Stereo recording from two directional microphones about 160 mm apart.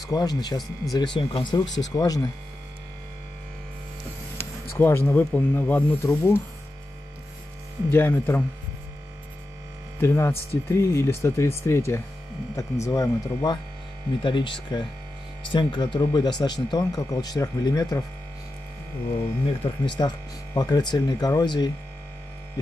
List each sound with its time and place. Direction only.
0.0 s speech: 25° left (ahead or behind)
4.4 s speech: 15° left (ahead or behind)
7.9 s speech: 15° left (ahead or behind)
9.9 s hum: 15° left (ahead or behind)
10.7 s speech: 15° left (ahead or behind)
19.6 s speech: 25° left (ahead or behind)